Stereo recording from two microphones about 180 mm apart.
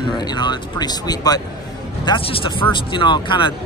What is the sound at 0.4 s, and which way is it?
Speech, 25° left (ahead or behind).